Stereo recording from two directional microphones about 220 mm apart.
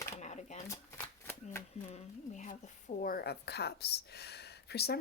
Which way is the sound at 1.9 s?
35° left (ahead or behind).